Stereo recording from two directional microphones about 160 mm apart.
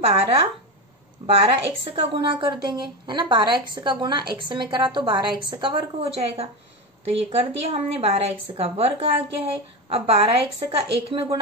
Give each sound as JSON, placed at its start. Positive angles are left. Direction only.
{"t": 0.0, "sound": "a woman's voice", "side_deg": -35}